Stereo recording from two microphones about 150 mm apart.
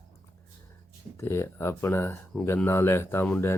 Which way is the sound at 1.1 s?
15° left (ahead or behind).